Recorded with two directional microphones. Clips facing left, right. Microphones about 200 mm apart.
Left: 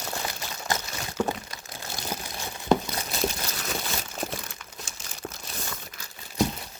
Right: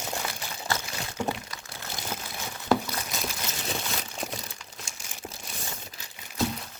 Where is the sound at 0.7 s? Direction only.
15° left (ahead or behind).